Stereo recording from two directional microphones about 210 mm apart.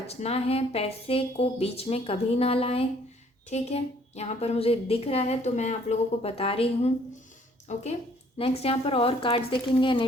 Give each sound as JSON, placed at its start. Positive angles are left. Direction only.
{"t": 0.1, "sound": "speech", "side_deg": 30}